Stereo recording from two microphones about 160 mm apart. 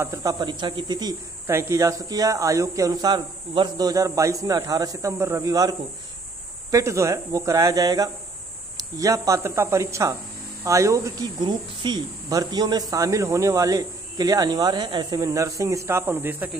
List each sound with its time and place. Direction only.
0.0 s speech: 20° right (ahead or behind)